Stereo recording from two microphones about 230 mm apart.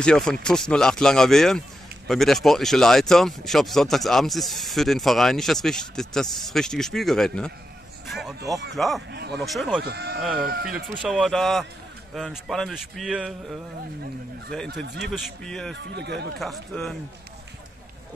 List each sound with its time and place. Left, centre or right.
0.0 s speech: centre
8.1 s a sound: centre
8.7 s speech: centre
9.1 s speech: right
9.4 s speech: centre
9.8 s speech: right
11.0 s speech: centre
14.7 s speech: right
15.0 s speech: centre
15.9 s speech: right
16.3 s speech: centre